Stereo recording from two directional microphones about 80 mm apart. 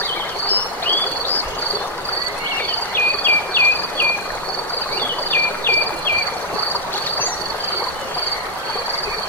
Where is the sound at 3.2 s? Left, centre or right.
Left.